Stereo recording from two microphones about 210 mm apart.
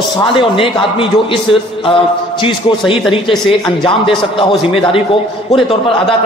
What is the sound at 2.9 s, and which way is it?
A man's voice, 25° left (ahead or behind).